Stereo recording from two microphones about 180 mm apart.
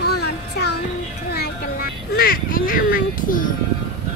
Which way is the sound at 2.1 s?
55° left (ahead or behind).